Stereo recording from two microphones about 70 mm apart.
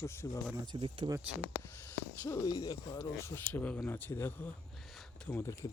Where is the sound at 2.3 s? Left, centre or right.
Left.